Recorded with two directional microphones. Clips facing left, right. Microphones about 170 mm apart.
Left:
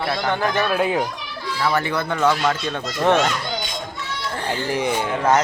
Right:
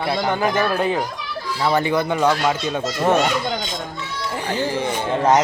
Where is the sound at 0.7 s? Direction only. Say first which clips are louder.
Even; 10° left (ahead or behind).